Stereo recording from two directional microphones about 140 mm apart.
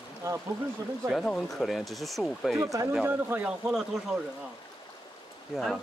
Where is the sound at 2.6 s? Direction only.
20° right (ahead or behind).